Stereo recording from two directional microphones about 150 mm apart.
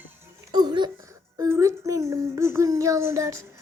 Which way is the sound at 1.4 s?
20° right (ahead or behind).